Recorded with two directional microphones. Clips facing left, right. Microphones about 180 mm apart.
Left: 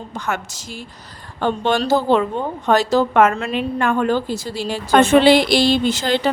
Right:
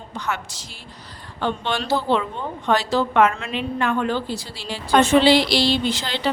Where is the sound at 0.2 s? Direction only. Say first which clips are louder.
Left 3 dB; 45° left (ahead or behind).